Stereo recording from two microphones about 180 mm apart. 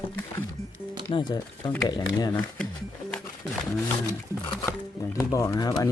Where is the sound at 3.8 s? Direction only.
15° left (ahead or behind).